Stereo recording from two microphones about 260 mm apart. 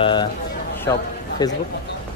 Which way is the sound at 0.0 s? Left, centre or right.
Centre.